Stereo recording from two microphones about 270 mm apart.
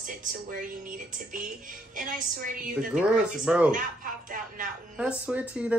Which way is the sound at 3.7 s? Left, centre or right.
Right.